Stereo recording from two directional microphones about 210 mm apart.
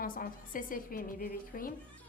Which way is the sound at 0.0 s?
40° left (ahead or behind).